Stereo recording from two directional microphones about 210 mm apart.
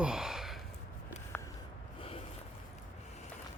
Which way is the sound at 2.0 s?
25° left (ahead or behind).